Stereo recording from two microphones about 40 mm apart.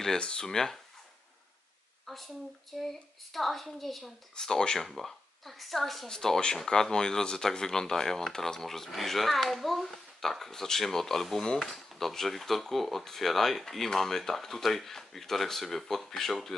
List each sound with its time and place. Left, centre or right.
0.2 s speech: centre
2.0 s speech: centre
4.4 s speech: centre